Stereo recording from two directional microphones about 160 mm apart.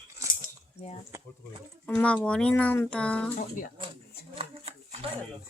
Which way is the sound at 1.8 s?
10° left (ahead or behind).